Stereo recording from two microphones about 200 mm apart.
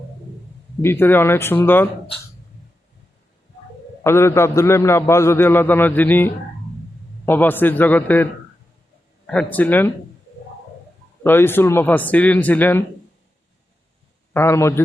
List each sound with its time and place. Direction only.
0.8 s a man's voice: 10° left (ahead or behind)
4.0 s a man's voice: 15° left (ahead or behind)
11.2 s a man's voice: 10° left (ahead or behind)
14.3 s a man's voice: 15° left (ahead or behind)